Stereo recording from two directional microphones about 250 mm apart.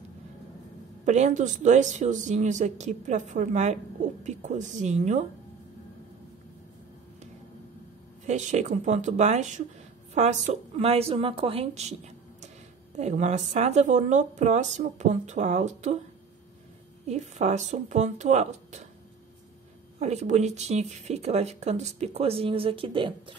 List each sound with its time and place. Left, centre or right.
1.0 s speech: right
8.3 s a woman's voice: right
17.1 s speech: right
20.0 s speech: right